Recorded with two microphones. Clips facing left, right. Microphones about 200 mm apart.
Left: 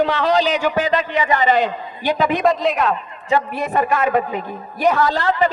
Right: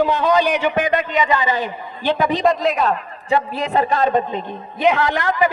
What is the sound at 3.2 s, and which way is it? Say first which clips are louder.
Speech: even; 30° right (ahead or behind).